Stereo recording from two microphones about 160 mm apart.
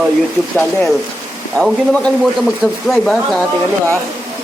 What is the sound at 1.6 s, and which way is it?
Speech, 5° left (ahead or behind).